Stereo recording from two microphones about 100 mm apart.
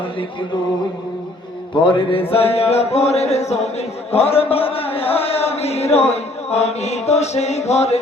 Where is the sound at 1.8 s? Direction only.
60° left (ahead or behind).